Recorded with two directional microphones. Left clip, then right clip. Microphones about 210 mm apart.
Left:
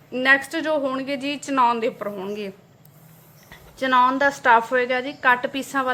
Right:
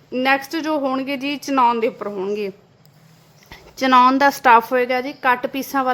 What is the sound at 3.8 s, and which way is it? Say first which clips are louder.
A woman's voice: right 5 dB; 40° right (ahead or behind).